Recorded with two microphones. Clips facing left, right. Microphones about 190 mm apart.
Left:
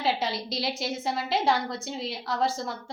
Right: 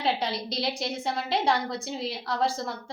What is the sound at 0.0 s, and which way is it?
A woman's voice, centre (ahead or behind).